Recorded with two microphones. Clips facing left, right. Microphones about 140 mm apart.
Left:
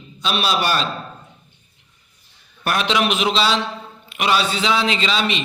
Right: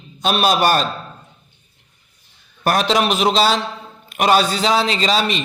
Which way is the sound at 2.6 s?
40° right (ahead or behind).